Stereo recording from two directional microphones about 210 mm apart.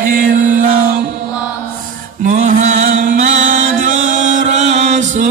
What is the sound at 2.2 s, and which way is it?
Mantra, 35° right (ahead or behind).